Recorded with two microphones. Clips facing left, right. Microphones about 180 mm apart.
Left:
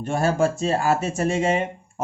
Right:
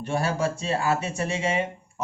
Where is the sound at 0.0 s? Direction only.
45° left (ahead or behind).